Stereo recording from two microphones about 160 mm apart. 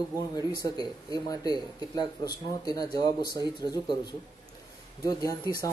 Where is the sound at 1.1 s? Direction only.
25° left (ahead or behind).